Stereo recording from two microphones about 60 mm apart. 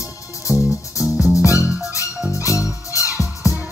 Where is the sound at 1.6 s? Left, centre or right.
Centre.